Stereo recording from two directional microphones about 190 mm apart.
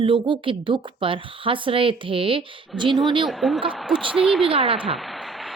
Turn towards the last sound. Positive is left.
turn(degrees=0)  # may be behind; listen again after turning